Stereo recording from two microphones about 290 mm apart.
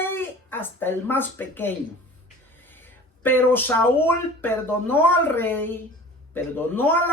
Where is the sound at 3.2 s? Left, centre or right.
Centre.